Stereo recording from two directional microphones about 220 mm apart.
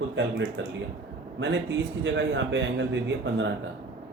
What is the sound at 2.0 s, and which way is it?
A man's voice, 55° right (ahead or behind).